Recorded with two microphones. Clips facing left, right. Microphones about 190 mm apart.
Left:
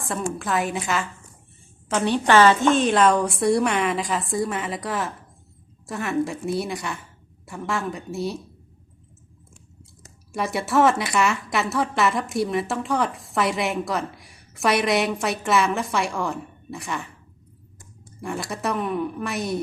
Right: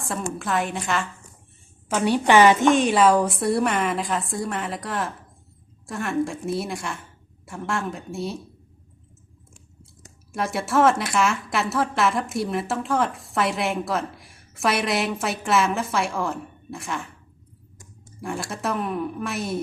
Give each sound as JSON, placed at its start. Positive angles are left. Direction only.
{"t": 0.0, "sound": "a woman's voice", "side_deg": 0}
{"t": 1.9, "sound": "a woman's voice", "side_deg": -10}
{"t": 10.3, "sound": "a woman's voice", "side_deg": 0}
{"t": 18.2, "sound": "a woman's voice", "side_deg": 0}